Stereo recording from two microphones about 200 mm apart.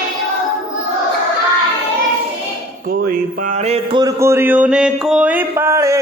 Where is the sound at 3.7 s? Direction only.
20° right (ahead or behind).